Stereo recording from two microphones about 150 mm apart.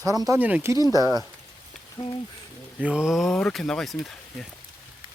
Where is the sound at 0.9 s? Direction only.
25° right (ahead or behind).